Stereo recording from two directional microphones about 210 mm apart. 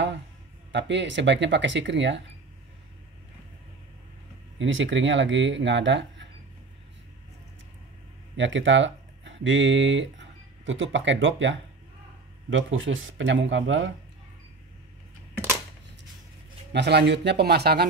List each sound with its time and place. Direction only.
0.7 s speech: 55° right (ahead or behind)
4.6 s speech: 60° right (ahead or behind)
8.4 s speech: 60° right (ahead or behind)
16.7 s speech: 55° right (ahead or behind)